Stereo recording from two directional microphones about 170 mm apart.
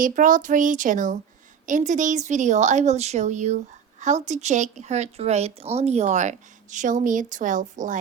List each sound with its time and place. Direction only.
0.0 s speech: 50° right (ahead or behind)